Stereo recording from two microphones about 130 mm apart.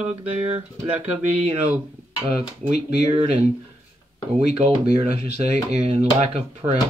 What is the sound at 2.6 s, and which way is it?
Speech, 55° right (ahead or behind).